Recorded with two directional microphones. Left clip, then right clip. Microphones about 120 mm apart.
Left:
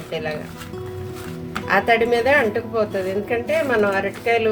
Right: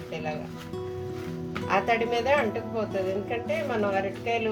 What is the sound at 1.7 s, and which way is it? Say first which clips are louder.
A woman's voice: left 8 dB; 20° left (ahead or behind).